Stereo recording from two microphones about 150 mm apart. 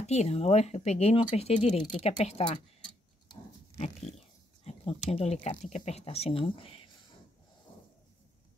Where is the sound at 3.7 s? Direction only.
45° left (ahead or behind).